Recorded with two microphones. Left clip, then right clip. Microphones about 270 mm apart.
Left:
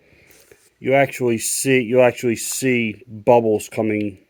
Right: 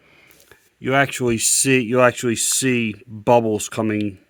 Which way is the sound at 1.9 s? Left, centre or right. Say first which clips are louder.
Left 1 dB; right.